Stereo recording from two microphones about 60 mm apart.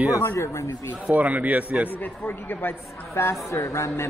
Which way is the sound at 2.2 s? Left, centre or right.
Left.